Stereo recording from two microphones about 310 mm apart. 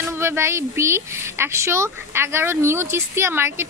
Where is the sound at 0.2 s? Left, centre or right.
Centre.